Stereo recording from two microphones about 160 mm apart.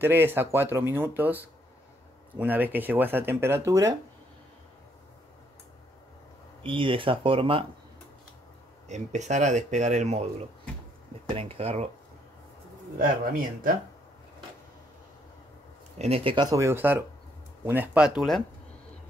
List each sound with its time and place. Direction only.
0.0 s speech: 15° right (ahead or behind)
6.6 s speech: 30° right (ahead or behind)
8.8 s speech: 45° right (ahead or behind)
11.2 s speech: 35° right (ahead or behind)
13.0 s speech: 65° right (ahead or behind)
16.0 s speech: 35° right (ahead or behind)
16.4 s speech: 20° right (ahead or behind); by 18.4 s centre (ahead or behind)